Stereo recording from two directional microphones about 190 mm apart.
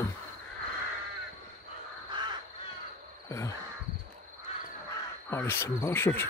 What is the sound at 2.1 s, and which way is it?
Crow, 25° right (ahead or behind).